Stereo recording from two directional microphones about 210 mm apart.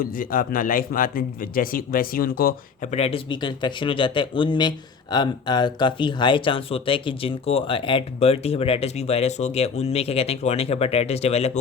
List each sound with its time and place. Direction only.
0.0 s a man's voice: 40° left (ahead or behind)
2.9 s speech: 30° left (ahead or behind)